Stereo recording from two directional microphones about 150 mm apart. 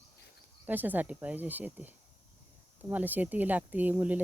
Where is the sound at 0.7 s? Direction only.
10° right (ahead or behind).